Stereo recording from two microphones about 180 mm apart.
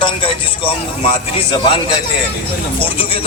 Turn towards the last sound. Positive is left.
turn(degrees=30)  # may be behind; listen again after turning